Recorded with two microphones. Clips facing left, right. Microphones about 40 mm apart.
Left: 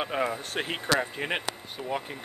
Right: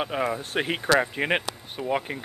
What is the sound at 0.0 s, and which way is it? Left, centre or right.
Speech, centre.